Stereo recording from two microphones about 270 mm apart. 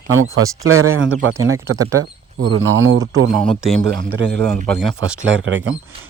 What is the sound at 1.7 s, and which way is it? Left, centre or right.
Speech, centre.